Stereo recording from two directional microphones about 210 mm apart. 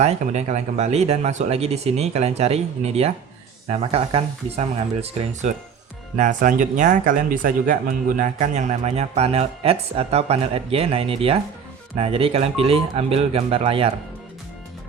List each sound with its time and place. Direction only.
0.0 s speech: 30° right (ahead or behind)